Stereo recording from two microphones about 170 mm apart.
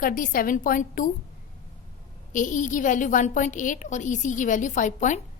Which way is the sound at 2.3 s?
50° left (ahead or behind).